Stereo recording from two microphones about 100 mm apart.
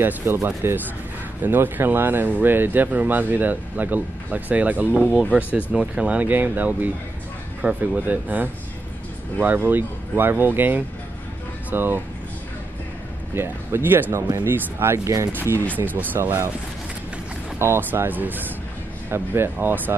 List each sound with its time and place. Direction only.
0.0 s speech: 25° right (ahead or behind)
13.3 s speech: 25° right (ahead or behind)
15.3 s a sound: 25° right (ahead or behind)
15.7 s speech: 20° right (ahead or behind)
17.6 s speech: 25° right (ahead or behind)